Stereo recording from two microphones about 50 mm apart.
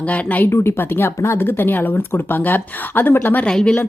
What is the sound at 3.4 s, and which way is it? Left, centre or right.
Speech, centre.